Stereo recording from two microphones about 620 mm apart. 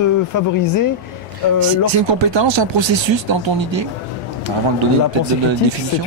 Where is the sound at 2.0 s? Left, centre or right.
Right.